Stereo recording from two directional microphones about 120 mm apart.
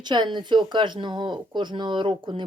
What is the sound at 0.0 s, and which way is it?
Speech, 40° right (ahead or behind).